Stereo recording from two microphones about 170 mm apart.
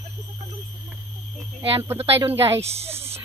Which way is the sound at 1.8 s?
15° right (ahead or behind).